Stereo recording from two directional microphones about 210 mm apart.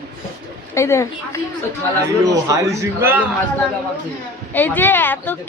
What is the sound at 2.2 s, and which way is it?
A man's voice, 15° right (ahead or behind).